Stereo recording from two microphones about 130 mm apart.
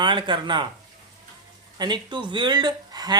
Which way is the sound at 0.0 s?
40° right (ahead or behind).